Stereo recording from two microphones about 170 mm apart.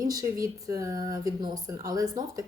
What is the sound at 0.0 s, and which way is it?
Speech, 20° right (ahead or behind).